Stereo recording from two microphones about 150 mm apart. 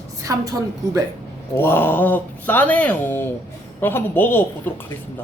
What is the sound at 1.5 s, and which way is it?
Speech, 15° left (ahead or behind).